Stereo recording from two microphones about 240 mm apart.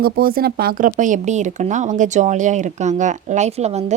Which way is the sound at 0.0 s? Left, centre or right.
Right.